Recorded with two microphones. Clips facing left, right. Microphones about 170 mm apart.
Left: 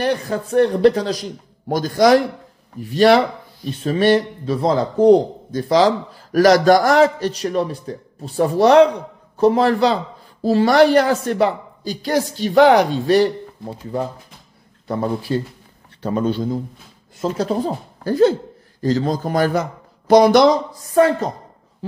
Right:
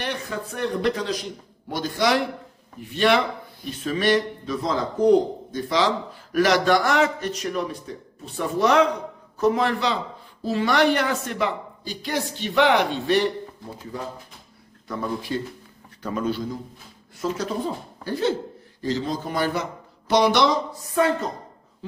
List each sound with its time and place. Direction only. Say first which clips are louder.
0.0 s speech: left 9 dB; 40° left (ahead or behind)
14.9 s a man's voice: left 7 dB; 35° left (ahead or behind)